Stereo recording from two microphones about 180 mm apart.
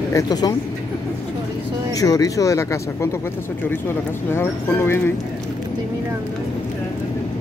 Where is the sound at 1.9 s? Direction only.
20° left (ahead or behind).